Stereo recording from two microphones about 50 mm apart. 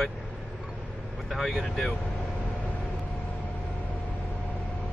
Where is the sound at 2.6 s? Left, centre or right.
Left.